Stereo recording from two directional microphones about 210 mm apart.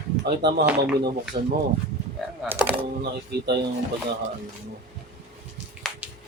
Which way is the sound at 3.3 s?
55° right (ahead or behind).